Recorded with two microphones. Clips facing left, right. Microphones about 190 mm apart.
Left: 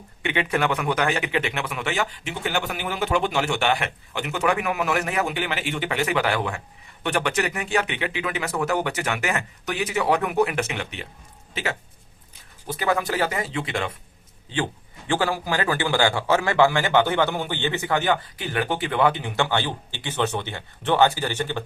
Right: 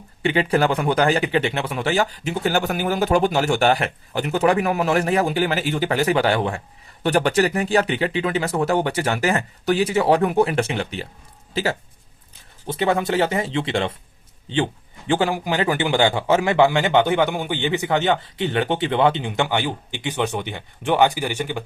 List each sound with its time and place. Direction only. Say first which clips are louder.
0.2 s a man's voice: right 5 dB; 35° right (ahead or behind); by 21.6 s 10° right (ahead or behind)